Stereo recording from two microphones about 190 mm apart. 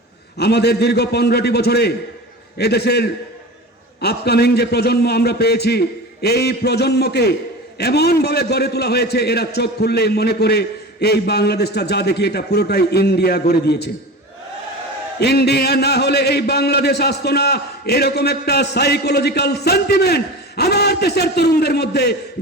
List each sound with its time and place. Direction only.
0.3 s a man's voice: 60° left (ahead or behind)
15.2 s a man's voice: 60° left (ahead or behind)